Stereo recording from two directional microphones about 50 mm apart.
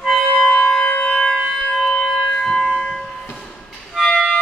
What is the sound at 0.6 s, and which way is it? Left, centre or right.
Siren, centre.